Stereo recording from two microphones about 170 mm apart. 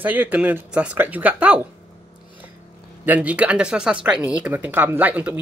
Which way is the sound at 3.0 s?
10° right (ahead or behind).